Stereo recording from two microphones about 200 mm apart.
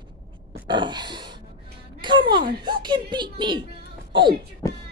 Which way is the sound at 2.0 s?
25° right (ahead or behind).